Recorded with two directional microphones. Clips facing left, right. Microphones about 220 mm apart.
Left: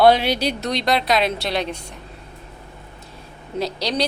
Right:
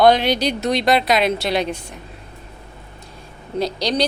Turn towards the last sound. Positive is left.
turn(degrees=5)  # may be behind; listen again after turning